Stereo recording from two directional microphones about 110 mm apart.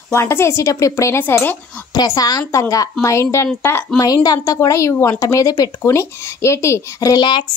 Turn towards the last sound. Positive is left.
turn(degrees=40)  # may be behind; listen again after turning